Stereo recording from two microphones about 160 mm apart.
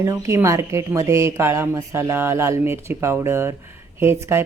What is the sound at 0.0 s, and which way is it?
Speech, 20° right (ahead or behind).